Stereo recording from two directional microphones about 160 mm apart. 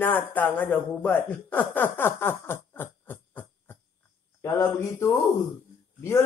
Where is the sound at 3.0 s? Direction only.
10° left (ahead or behind).